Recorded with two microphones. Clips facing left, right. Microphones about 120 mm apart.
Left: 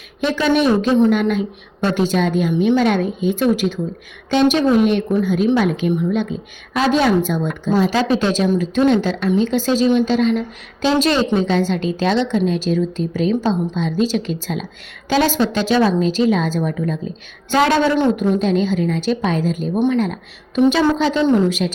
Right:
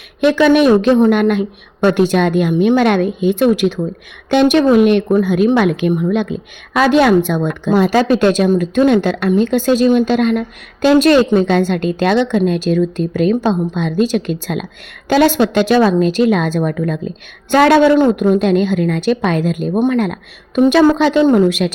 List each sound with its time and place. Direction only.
0.2 s a woman's voice: 65° right (ahead or behind)
18.2 s a woman's voice: 65° right (ahead or behind)
19.7 s speech: 45° right (ahead or behind)
20.7 s a woman's voice: 65° right (ahead or behind)